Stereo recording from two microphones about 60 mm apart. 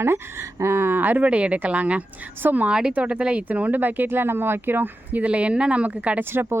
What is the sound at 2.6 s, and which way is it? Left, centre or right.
Speech, centre.